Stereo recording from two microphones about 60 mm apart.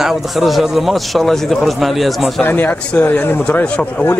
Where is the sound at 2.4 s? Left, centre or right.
Left.